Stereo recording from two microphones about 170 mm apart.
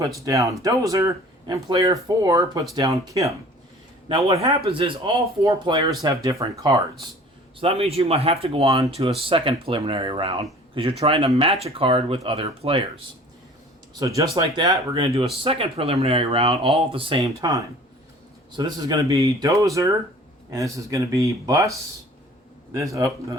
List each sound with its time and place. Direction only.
0.0 s speech: 20° right (ahead or behind)
4.1 s speech: 35° right (ahead or behind)
7.6 s speech: 35° right (ahead or behind)
14.0 s speech: 20° right (ahead or behind)
15.4 s speech: 35° right (ahead or behind); by 23.1 s 20° right (ahead or behind)